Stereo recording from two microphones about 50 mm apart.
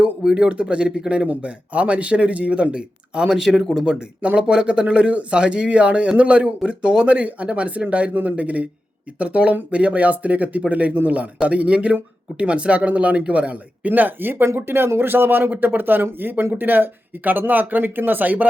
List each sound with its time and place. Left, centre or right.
0.2 s speech: centre
3.5 s speech: centre
4.2 s speech: right